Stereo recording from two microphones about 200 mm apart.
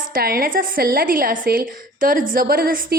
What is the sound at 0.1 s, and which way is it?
A woman's voice, 45° right (ahead or behind).